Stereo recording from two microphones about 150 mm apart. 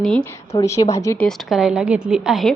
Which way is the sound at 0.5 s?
20° left (ahead or behind).